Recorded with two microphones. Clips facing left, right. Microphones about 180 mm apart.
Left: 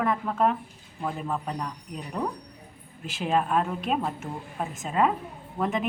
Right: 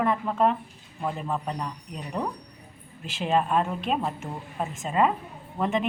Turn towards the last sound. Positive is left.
turn(degrees=5)  # may be behind; listen again after turning